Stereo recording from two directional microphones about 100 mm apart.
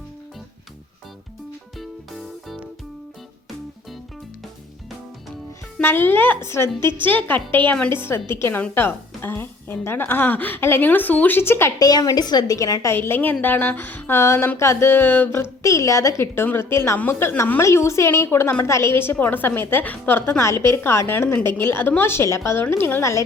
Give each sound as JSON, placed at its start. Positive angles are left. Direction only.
{"t": 1.8, "sound": "music", "side_deg": 0}
{"t": 5.8, "sound": "a woman's voice", "side_deg": 20}
{"t": 11.8, "sound": "a woman's voice", "side_deg": 40}
{"t": 13.0, "sound": "speech", "side_deg": 20}